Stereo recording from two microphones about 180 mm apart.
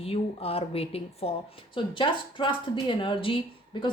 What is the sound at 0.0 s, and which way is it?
Speech, 35° left (ahead or behind).